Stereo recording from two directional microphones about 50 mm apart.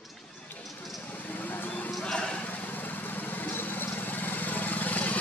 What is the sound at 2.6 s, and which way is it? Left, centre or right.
Vehicle, left.